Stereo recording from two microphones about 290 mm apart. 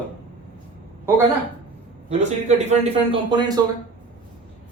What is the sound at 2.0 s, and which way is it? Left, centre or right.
A man's voice, right.